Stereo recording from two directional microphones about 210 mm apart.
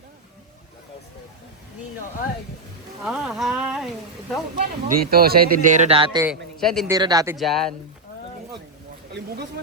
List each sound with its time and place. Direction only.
3.0 s a sound: centre (ahead or behind)
4.5 s speech: 45° right (ahead or behind)
6.2 s a man's voice: centre (ahead or behind)
6.8 s speech: 15° right (ahead or behind)
7.3 s speech: centre (ahead or behind)
9.1 s speech: 50° right (ahead or behind)